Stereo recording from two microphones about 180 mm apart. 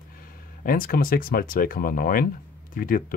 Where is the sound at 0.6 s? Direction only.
50° left (ahead or behind).